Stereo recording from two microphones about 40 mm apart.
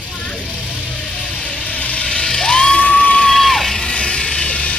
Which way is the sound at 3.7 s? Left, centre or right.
Left.